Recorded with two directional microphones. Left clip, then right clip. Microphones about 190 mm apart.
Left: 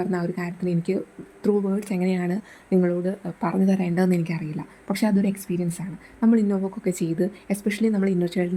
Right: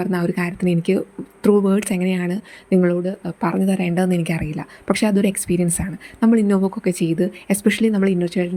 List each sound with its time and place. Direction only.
0.0 s speech: 15° right (ahead or behind)